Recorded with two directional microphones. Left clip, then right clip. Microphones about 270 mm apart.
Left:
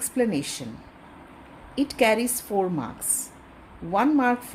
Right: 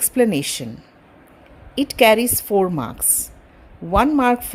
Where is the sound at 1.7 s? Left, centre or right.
Right.